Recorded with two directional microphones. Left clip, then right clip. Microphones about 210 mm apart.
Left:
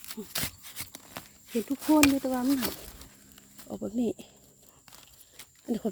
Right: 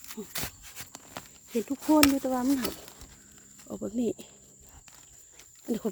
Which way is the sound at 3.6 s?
5° right (ahead or behind).